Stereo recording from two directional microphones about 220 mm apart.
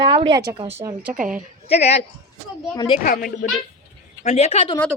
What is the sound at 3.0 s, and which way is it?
Speech, 40° left (ahead or behind).